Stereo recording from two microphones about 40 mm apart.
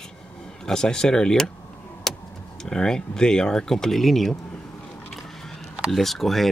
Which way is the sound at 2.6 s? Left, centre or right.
Centre.